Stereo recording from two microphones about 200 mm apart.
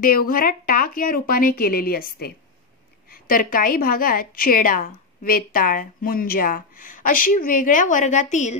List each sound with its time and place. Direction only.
0.0 s a woman's voice: 45° left (ahead or behind)